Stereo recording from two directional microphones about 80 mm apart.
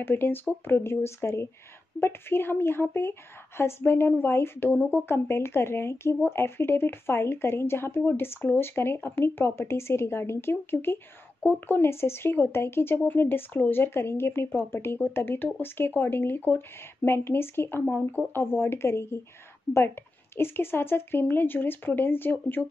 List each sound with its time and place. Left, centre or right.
0.0 s speech: left